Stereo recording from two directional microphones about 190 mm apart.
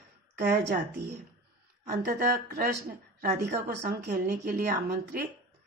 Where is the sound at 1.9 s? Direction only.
50° right (ahead or behind).